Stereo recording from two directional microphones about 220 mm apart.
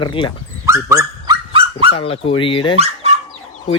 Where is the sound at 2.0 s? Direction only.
25° left (ahead or behind).